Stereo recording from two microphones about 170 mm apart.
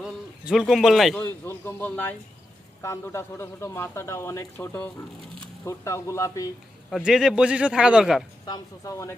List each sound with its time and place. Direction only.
0.0 s a man's voice: 5° right (ahead or behind)
1.2 s speech: 15° left (ahead or behind)
6.9 s a man's voice: 5° right (ahead or behind)
8.4 s speech: 20° left (ahead or behind)